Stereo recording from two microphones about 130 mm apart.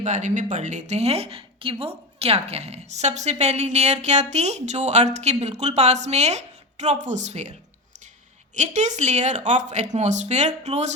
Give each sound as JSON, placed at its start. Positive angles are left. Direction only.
{"t": 0.0, "sound": "speech", "side_deg": -65}
{"t": 8.5, "sound": "speech", "side_deg": -65}